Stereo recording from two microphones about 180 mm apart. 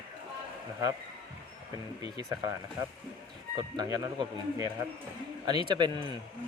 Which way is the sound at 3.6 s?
20° right (ahead or behind).